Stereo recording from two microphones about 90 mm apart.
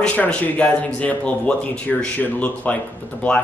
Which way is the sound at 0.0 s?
15° left (ahead or behind).